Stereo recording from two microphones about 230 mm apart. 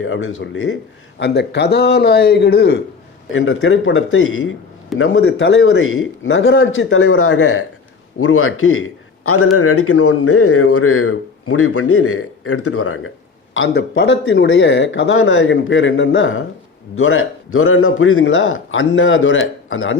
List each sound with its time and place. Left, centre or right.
0.0 s a man's voice: left
1.2 s a man's voice: left
3.3 s a man's voice: left
13.5 s a man's voice: left